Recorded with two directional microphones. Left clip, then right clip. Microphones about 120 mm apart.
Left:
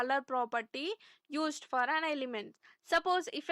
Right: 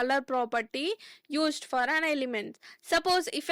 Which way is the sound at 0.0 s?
30° right (ahead or behind).